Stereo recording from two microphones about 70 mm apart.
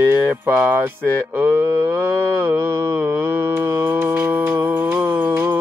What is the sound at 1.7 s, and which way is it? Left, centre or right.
Mantra, right.